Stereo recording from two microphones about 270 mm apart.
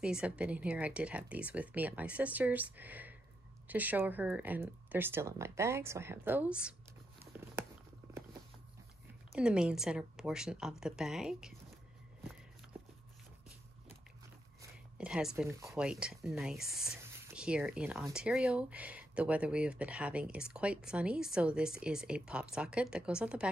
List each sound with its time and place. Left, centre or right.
0.0 s speech: centre
9.3 s speech: centre
14.6 s speech: centre